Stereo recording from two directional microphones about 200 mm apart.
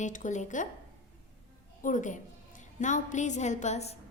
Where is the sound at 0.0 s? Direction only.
40° left (ahead or behind).